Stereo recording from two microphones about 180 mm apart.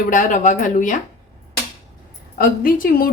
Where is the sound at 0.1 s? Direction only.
45° left (ahead or behind).